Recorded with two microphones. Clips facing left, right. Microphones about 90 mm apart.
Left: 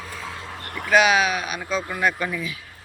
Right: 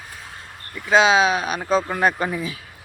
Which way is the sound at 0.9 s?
25° right (ahead or behind).